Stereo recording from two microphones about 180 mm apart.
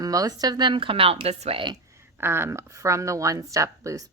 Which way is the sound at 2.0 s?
15° right (ahead or behind).